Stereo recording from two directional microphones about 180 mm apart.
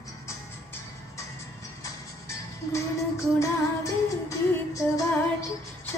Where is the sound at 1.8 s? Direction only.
15° left (ahead or behind).